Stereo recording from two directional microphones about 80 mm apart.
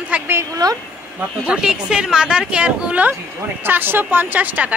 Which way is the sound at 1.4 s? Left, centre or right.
Centre.